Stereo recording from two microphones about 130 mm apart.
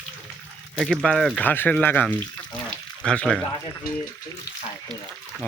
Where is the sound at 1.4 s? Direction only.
15° left (ahead or behind).